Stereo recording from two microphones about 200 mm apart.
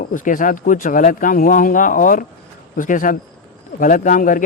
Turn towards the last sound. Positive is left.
turn(degrees=40)  # may be behind; listen again after turning